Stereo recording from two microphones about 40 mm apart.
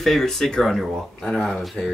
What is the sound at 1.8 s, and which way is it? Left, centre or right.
Speech, centre.